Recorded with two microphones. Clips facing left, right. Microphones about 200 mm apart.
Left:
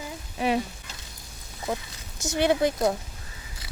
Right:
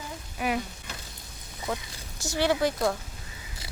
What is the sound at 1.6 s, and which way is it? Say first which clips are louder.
Speech: left 2 dB; 20° left (ahead or behind).